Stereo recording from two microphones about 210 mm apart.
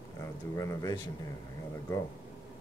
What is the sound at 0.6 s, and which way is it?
Speech, 15° left (ahead or behind).